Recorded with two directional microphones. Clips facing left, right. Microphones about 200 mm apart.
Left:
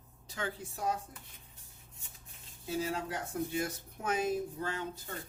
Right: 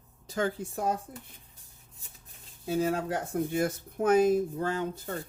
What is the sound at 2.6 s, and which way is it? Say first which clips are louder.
Speech: right 7 dB; 55° right (ahead or behind).